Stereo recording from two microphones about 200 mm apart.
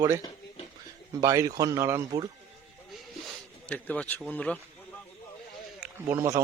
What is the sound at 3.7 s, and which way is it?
Speech, 5° left (ahead or behind).